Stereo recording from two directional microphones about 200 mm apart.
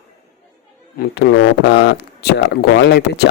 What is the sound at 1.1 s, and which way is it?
Speech, 65° left (ahead or behind).